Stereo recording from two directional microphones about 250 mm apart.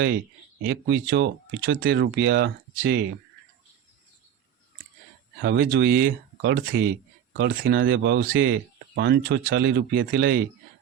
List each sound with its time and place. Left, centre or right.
0.6 s speech: right
5.4 s speech: right